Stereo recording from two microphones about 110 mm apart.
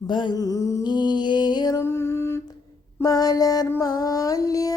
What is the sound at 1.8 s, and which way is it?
Music, 25° left (ahead or behind).